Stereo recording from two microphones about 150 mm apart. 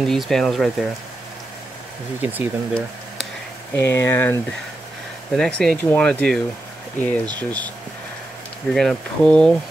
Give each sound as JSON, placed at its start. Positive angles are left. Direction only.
{"t": 0.0, "sound": "speech", "side_deg": 0}
{"t": 2.2, "sound": "speech", "side_deg": -10}
{"t": 3.7, "sound": "speech", "side_deg": 15}
{"t": 5.4, "sound": "speech", "side_deg": 5}
{"t": 8.7, "sound": "speech", "side_deg": 5}